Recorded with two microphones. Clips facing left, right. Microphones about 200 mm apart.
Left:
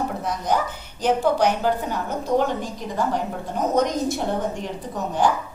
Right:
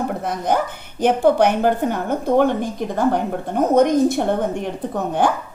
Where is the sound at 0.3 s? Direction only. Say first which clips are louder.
Right 3 dB; 55° right (ahead or behind).